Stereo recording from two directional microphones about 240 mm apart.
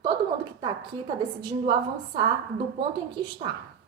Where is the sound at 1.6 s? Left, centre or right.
Centre.